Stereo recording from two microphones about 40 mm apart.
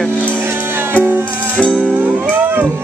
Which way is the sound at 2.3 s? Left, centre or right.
Right.